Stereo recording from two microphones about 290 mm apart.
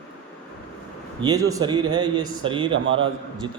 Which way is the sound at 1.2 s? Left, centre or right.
Centre.